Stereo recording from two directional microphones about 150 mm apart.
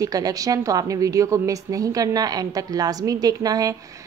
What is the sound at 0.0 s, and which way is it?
A woman's voice, 25° right (ahead or behind).